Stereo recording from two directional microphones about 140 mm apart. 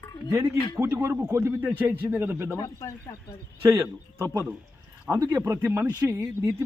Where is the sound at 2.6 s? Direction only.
20° left (ahead or behind).